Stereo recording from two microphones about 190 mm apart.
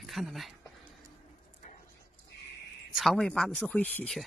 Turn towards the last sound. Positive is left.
turn(degrees=5)  # may be behind; listen again after turning